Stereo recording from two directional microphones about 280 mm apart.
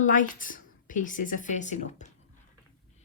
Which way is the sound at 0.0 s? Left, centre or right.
Left.